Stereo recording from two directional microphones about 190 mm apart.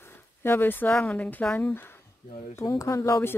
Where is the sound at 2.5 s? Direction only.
15° left (ahead or behind).